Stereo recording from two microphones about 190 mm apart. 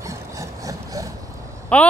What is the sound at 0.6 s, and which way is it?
Sawing, 15° right (ahead or behind).